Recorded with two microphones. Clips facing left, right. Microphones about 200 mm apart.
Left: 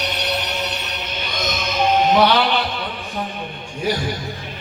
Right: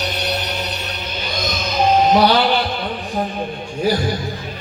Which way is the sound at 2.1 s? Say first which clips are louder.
Even; 35° right (ahead or behind).